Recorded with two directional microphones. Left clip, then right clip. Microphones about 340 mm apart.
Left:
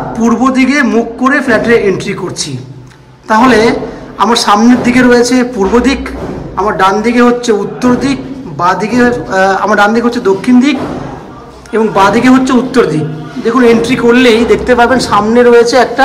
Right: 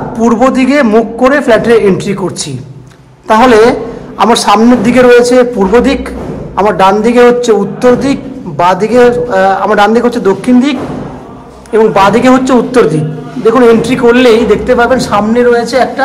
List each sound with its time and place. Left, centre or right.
0.2 s a man's voice: centre
4.2 s a man's voice: centre